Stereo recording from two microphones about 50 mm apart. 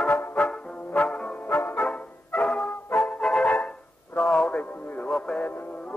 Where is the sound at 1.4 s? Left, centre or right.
Left.